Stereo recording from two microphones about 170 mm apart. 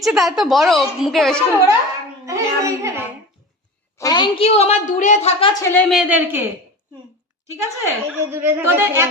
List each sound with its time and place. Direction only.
0.0 s a woman's voice: centre (ahead or behind)
2.2 s a woman's voice: 20° right (ahead or behind)
3.9 s a woman's voice: 25° left (ahead or behind); by 5.3 s 45° left (ahead or behind)
5.4 s a woman's voice: 20° left (ahead or behind)
5.9 s a woman's voice: 5° right (ahead or behind)